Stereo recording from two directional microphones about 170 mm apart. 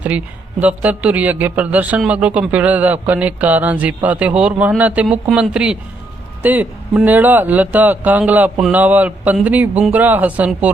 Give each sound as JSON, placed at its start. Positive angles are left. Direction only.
{"t": 0.6, "sound": "a man's voice", "side_deg": -10}